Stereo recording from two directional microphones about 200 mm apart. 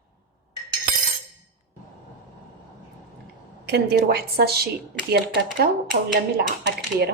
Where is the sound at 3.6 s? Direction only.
55° right (ahead or behind).